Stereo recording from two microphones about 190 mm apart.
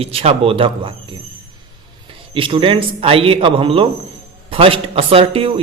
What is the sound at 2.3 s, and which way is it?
Speech, 25° right (ahead or behind).